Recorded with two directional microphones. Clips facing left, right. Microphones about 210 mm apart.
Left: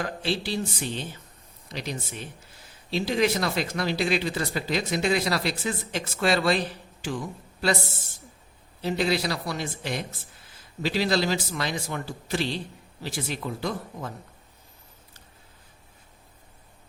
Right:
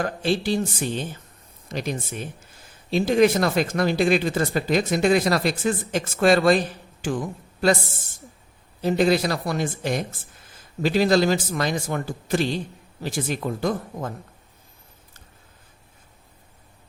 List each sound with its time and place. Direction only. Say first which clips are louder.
0.0 s a man's voice: right 5 dB; 45° right (ahead or behind)
8.8 s speech: right 6 dB; 50° right (ahead or behind)